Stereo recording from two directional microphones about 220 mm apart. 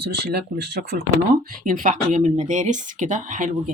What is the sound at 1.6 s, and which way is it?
Speech, 35° right (ahead or behind).